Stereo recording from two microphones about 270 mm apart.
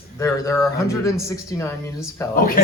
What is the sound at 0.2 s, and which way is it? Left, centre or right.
Speech, centre.